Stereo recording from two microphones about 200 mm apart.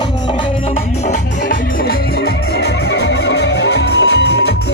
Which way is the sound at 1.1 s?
45° left (ahead or behind).